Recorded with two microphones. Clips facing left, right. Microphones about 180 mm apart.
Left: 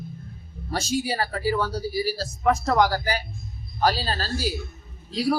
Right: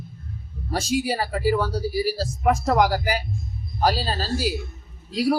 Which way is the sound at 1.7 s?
35° right (ahead or behind).